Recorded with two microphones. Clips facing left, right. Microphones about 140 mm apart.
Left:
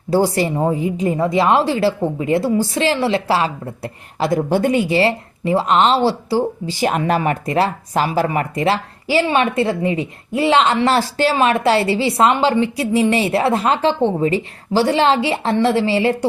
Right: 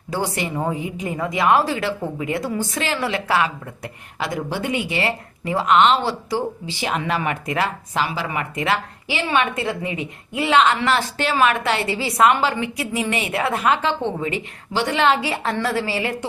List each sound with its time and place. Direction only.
0.1 s a woman's voice: 35° left (ahead or behind)